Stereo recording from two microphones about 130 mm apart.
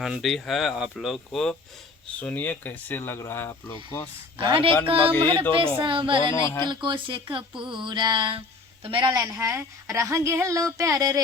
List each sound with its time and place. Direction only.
0.0 s speech: centre (ahead or behind); by 3.6 s 20° left (ahead or behind)
4.4 s speech: 45° right (ahead or behind)
6.4 s speech: 25° left (ahead or behind)
6.7 s speech: 35° right (ahead or behind)
7.5 s speech: 5° right (ahead or behind)
7.8 s a woman's voice: 35° right (ahead or behind)